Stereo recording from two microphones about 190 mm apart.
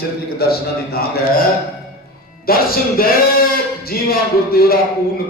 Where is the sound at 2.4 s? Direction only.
50° left (ahead or behind).